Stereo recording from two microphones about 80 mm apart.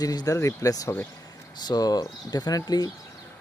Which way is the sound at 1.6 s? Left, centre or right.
Left.